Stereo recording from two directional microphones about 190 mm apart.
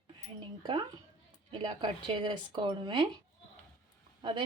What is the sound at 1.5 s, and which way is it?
A woman's voice, 25° right (ahead or behind).